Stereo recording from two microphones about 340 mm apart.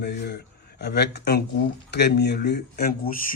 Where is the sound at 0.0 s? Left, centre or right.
Left.